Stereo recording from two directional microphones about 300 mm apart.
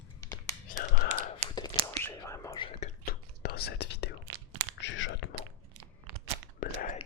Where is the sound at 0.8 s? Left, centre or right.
Left.